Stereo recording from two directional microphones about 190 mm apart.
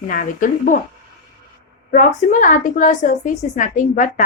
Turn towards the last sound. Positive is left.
turn(degrees=45)  # may be behind; listen again after turning